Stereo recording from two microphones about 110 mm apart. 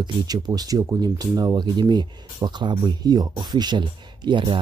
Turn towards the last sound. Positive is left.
turn(degrees=-45)  # may be behind; listen again after turning